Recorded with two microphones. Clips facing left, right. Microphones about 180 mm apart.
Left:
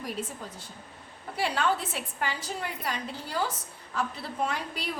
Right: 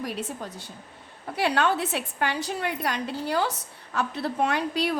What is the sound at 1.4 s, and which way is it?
A woman's voice, 75° right (ahead or behind).